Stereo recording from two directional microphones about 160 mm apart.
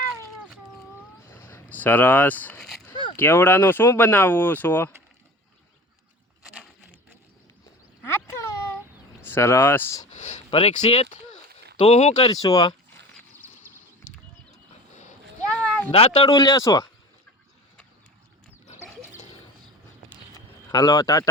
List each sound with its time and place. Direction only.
1.3 s vehicle: 15° left (ahead or behind)
3.2 s speech: 15° left (ahead or behind)
8.0 s a sound: 15° left (ahead or behind)
9.2 s speech: 15° left (ahead or behind)
10.2 s speech: 45° left (ahead or behind)
12.1 s speech: 25° left (ahead or behind)
14.9 s a sound: 50° left (ahead or behind)
15.4 s a sound: 5° left (ahead or behind)
15.9 s speech: 35° left (ahead or behind); by 16.9 s 20° left (ahead or behind)
20.7 s speech: 25° left (ahead or behind)